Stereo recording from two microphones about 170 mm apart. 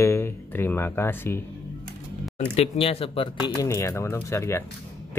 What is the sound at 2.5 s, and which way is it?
Speech, 35° left (ahead or behind).